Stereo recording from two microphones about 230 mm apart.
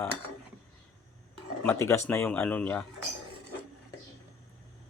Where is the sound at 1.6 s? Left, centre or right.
Centre.